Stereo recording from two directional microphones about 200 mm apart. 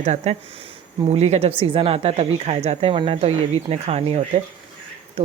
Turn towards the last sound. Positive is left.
turn(degrees=-30)  # may be behind; listen again after turning